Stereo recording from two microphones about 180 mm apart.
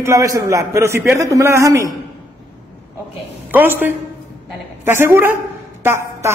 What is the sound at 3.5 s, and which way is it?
A man's voice, 10° right (ahead or behind).